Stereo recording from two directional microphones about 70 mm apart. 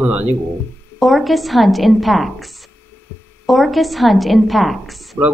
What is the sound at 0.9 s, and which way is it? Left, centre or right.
A woman's voice, centre.